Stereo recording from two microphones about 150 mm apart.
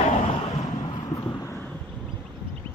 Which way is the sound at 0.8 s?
25° left (ahead or behind).